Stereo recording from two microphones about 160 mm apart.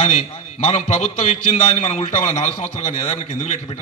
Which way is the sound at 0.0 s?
45° left (ahead or behind).